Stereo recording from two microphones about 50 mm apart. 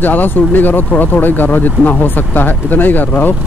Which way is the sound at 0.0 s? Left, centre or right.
Left.